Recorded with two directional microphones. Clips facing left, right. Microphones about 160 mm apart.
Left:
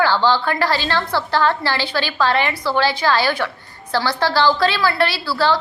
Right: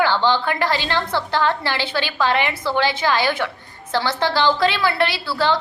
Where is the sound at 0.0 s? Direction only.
20° right (ahead or behind).